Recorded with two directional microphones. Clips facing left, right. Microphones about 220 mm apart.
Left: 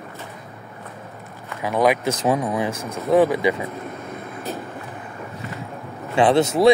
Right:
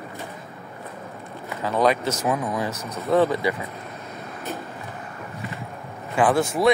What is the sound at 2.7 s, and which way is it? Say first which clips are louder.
Speech: left 4 dB; 50° left (ahead or behind).